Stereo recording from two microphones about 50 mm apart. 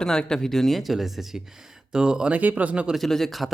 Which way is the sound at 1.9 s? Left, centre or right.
Centre.